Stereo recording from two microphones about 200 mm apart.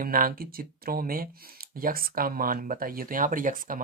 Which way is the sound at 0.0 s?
45° right (ahead or behind).